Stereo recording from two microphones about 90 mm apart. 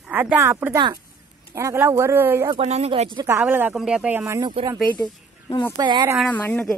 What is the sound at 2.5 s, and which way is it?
Speech, 80° right.